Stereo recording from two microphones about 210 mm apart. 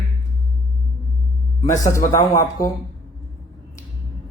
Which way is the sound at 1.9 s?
15° left (ahead or behind).